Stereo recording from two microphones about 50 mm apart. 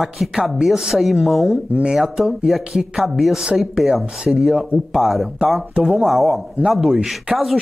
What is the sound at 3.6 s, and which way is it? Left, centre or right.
Speech, centre.